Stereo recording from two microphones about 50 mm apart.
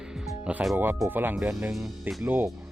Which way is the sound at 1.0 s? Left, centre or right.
Right.